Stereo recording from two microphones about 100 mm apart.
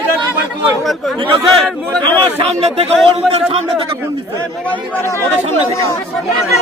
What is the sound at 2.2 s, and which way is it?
Speech, 75° right (ahead or behind).